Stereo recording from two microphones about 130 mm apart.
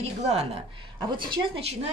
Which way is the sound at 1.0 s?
35° right (ahead or behind).